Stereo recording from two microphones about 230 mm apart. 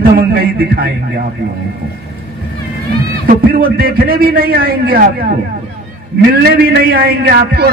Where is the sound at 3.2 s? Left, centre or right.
Right.